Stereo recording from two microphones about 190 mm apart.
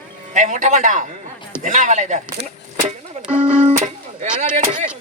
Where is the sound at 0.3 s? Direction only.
40° right (ahead or behind).